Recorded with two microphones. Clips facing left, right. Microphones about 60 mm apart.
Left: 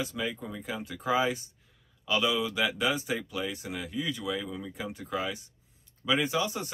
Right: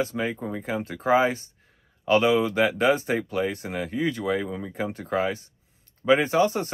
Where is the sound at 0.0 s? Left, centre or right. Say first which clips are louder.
Right 6 dB; right.